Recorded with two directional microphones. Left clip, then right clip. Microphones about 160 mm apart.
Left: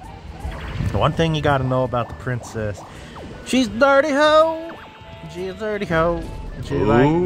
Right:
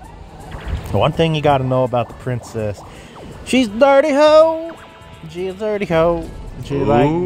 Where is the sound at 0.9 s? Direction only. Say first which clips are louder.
Right 4 dB; 15° right (ahead or behind).